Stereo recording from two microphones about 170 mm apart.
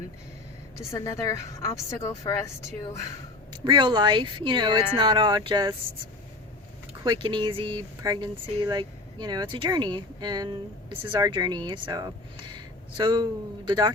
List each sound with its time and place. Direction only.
0.8 s a woman's voice: 20° left (ahead or behind)
3.5 s speech: 25° right (ahead or behind)
7.0 s speech: 25° right (ahead or behind)